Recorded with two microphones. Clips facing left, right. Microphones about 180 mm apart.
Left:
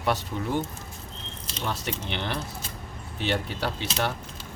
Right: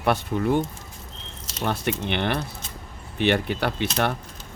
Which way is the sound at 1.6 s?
60° right (ahead or behind).